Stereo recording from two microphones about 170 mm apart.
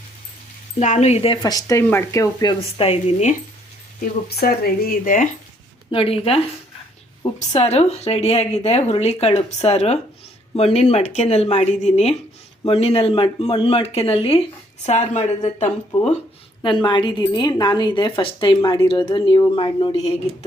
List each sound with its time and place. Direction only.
0.8 s a woman's voice: 40° left (ahead or behind)
1.4 s speech: 20° left (ahead or behind)
2.6 s a woman's voice: 35° left (ahead or behind)
4.0 s speech: 65° left (ahead or behind)
5.9 s a woman's voice: 35° left (ahead or behind)
16.6 s speech: 30° left (ahead or behind)